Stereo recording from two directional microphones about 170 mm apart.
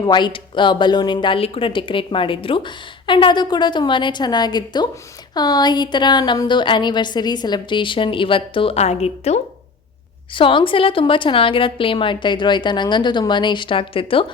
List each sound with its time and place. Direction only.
0.0 s speech: 25° left (ahead or behind)